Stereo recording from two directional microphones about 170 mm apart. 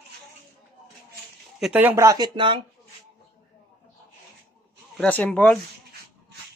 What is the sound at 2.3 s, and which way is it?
Speech, 30° right (ahead or behind).